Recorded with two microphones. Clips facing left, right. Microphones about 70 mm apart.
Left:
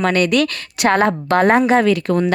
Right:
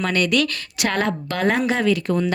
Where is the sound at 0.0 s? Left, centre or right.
Left.